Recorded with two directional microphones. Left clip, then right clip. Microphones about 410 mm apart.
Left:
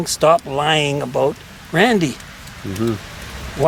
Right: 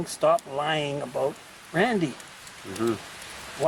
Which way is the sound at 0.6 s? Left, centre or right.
Centre.